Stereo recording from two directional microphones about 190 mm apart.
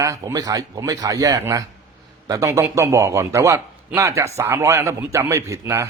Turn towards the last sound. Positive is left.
turn(degrees=-15)  # may be behind; listen again after turning